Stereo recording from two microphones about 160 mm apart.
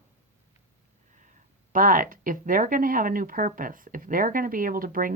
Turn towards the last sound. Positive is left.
turn(degrees=-60)  # may be behind; listen again after turning